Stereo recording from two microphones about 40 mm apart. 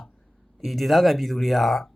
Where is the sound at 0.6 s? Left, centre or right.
Centre.